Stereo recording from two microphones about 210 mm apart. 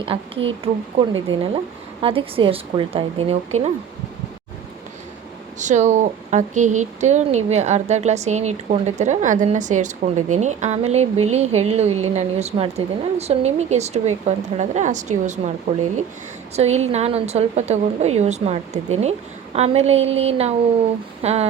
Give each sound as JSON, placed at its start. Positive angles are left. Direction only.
{"t": 0.1, "sound": "a woman's voice", "side_deg": -25}
{"t": 1.3, "sound": "speech", "side_deg": -65}
{"t": 2.0, "sound": "a woman's voice", "side_deg": -25}
{"t": 5.5, "sound": "speech", "side_deg": -35}
{"t": 16.6, "sound": "a woman's voice", "side_deg": -30}